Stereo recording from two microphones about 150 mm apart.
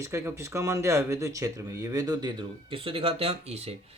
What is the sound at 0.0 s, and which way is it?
Speech, 15° right (ahead or behind).